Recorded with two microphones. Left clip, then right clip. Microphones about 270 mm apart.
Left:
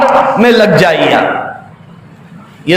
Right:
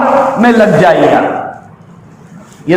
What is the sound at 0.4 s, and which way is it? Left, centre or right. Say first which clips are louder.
Speech: right 2 dB; left.